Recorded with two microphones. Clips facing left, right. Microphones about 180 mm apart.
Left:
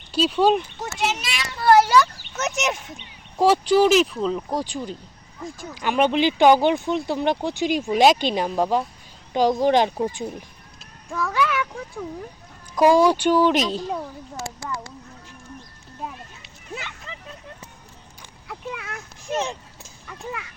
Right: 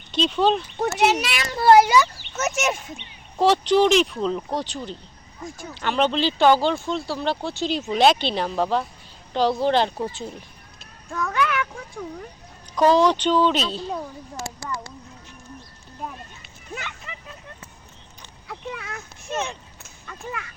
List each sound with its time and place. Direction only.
0.1 s speech: 10° left (ahead or behind)
0.8 s a child's voice: 65° right (ahead or behind)
1.5 s speech: 20° right (ahead or behind)
1.9 s speech: 5° right (ahead or behind); by 10.3 s 15° left (ahead or behind)
11.1 s child singing: 5° left (ahead or behind)
12.7 s speech: 10° left (ahead or behind)
18.4 s a sound: centre (ahead or behind)